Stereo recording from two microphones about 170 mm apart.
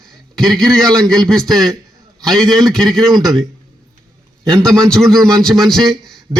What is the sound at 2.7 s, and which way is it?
Speech, centre (ahead or behind).